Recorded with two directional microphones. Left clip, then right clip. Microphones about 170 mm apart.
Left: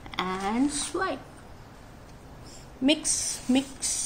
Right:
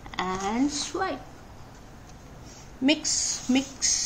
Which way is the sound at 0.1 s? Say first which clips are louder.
Right 1 dB; 15° left (ahead or behind).